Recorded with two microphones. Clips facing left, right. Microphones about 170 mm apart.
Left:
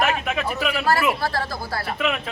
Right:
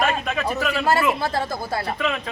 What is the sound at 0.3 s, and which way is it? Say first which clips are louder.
Speech: right 1 dB; 5° left (ahead or behind).